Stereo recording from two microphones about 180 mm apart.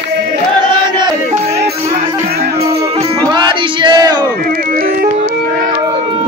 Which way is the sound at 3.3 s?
25° right (ahead or behind).